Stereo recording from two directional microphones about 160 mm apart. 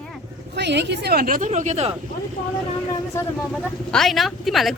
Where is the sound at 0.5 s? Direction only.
90° right; by 1.9 s 45° right (ahead or behind).